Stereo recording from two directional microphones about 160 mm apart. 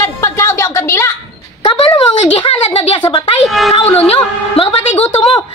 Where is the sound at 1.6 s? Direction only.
25° left (ahead or behind).